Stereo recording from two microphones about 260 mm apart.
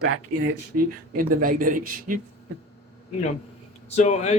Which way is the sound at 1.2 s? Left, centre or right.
Right.